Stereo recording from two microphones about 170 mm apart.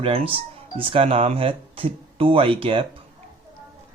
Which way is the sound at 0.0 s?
35° right (ahead or behind).